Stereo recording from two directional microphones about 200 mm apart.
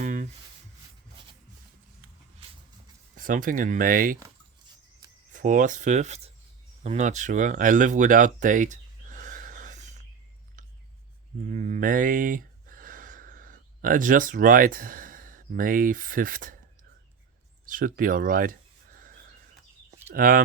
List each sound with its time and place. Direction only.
0.0 s a sound: 40° right (ahead or behind)
3.2 s speech: 40° right (ahead or behind)
5.3 s speech: 40° right (ahead or behind)
11.4 s speech: 40° right (ahead or behind)
17.7 s a sound: 45° right (ahead or behind)
20.1 s speech: 45° right (ahead or behind)